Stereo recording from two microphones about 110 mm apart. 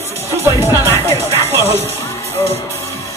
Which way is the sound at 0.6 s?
25° right (ahead or behind).